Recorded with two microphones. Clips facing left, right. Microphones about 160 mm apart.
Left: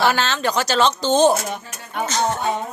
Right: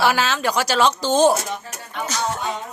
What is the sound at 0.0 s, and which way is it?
Speech, 5° right (ahead or behind).